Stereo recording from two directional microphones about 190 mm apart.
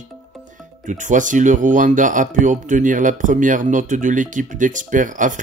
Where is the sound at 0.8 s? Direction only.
40° right (ahead or behind).